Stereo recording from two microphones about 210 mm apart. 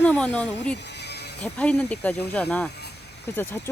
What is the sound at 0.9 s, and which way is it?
Music, 50° left (ahead or behind).